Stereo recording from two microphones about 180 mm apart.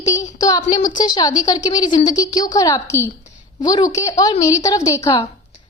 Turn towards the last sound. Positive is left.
turn(degrees=20)  # may be behind; listen again after turning